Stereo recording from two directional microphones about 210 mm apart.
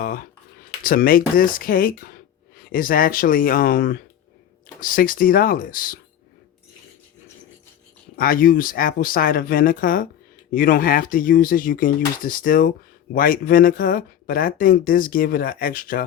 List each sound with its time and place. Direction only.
0.0 s speech: 45° left (ahead or behind)
8.1 s speech: 45° left (ahead or behind)